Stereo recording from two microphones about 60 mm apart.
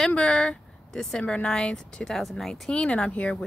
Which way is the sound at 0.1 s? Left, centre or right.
Centre.